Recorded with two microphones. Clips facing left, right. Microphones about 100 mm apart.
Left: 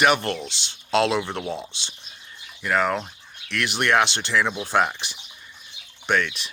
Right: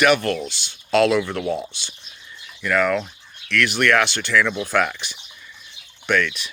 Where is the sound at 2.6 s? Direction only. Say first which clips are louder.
Right 3 dB; 30° left (ahead or behind).